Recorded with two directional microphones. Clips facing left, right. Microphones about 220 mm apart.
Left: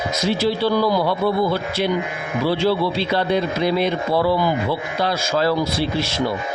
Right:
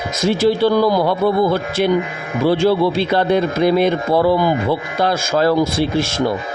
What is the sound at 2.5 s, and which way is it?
Speech, 50° right (ahead or behind).